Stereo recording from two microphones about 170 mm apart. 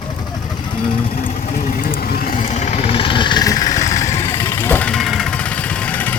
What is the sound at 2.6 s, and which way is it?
Vehicle, 40° left (ahead or behind).